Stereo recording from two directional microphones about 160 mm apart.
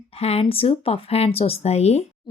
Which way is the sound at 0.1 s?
40° left (ahead or behind).